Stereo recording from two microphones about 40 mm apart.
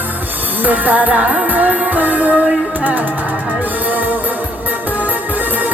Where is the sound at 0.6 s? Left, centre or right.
Right.